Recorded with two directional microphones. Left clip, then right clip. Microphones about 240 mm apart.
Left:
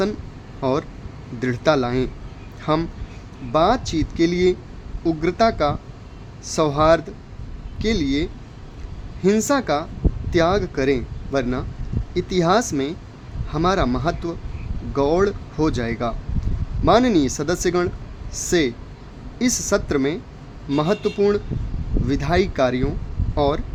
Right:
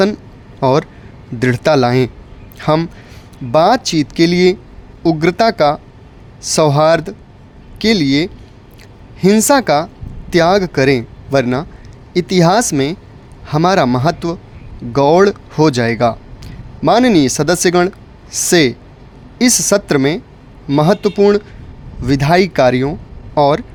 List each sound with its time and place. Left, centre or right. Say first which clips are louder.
0.6 s speech: right 9 dB; right